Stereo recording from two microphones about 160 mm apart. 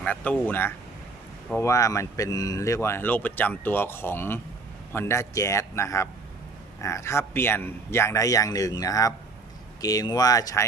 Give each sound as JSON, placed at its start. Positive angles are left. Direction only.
{"t": 0.0, "sound": "a man's voice", "side_deg": 10}